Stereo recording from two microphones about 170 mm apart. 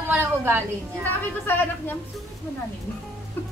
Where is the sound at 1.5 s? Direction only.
10° left (ahead or behind).